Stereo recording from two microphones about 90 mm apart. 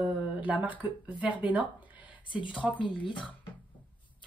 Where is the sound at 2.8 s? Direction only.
65° left (ahead or behind).